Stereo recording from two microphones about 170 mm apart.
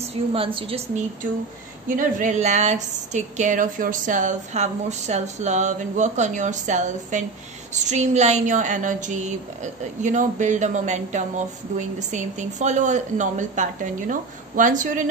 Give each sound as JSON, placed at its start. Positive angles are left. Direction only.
{"t": 0.0, "sound": "a woman's voice", "side_deg": -35}